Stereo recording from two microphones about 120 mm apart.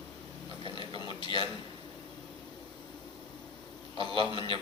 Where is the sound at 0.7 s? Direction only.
45° right (ahead or behind).